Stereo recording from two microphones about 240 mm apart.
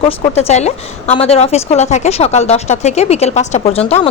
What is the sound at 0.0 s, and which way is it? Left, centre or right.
Speech, left.